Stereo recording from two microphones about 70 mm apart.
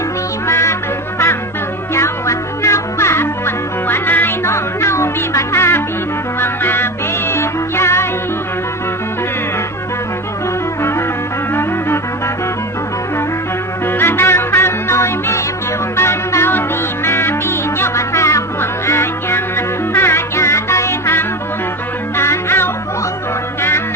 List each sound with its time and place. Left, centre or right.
0.4 s music: left
1.9 s music: left
4.4 s music: left
13.8 s music: left